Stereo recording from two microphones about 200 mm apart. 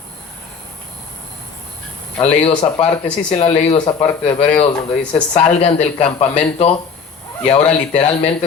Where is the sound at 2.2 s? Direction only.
30° left (ahead or behind).